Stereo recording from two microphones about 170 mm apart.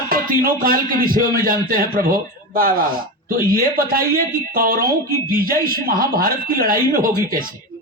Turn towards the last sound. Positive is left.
turn(degrees=-55)  # may be behind; listen again after turning